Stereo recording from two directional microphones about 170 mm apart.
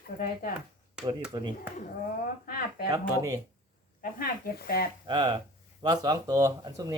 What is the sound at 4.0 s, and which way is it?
Speech, 60° left (ahead or behind).